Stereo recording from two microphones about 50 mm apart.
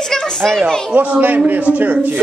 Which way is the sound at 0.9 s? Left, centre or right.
Right.